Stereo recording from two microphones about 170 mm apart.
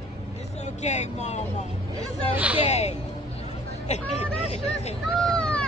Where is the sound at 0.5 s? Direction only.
40° left (ahead or behind).